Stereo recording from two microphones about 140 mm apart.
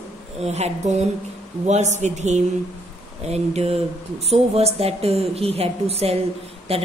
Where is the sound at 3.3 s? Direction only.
45° right (ahead or behind).